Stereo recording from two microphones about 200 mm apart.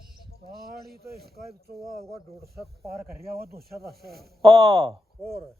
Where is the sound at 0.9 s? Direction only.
50° right (ahead or behind).